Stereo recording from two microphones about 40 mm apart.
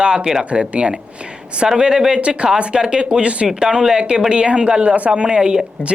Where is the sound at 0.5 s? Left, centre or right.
Right.